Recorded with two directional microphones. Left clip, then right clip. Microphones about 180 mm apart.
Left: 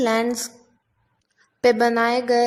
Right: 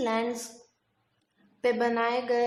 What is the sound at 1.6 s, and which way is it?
Speech, 35° left (ahead or behind).